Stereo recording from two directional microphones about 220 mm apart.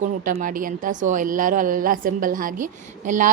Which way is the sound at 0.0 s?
40° right (ahead or behind).